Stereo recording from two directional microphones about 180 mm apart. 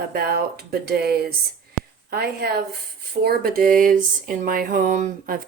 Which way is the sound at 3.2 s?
55° right (ahead or behind).